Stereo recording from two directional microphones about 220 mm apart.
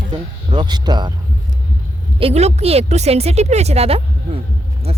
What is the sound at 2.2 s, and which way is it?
A woman's voice, 30° right (ahead or behind).